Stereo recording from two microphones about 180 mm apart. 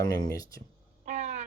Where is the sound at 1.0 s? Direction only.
40° right (ahead or behind).